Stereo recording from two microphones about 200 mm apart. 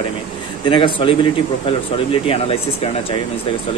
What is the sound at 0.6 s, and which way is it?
Speech, 25° left (ahead or behind).